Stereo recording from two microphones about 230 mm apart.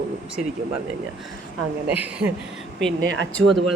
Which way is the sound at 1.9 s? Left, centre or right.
Centre.